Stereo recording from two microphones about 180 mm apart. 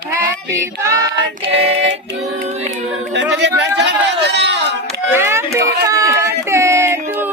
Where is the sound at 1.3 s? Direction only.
35° right (ahead or behind).